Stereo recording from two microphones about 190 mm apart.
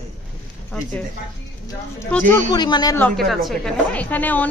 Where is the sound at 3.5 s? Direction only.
5° left (ahead or behind).